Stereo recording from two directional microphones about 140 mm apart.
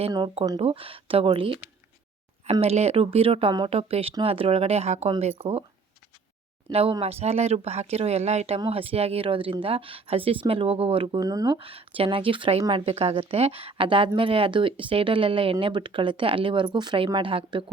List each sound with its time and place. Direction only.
0.6 s speech: 40° right (ahead or behind)
6.7 s speech: 45° right (ahead or behind)
11.2 s speech: 25° right (ahead or behind)
11.9 s speech: 40° right (ahead or behind)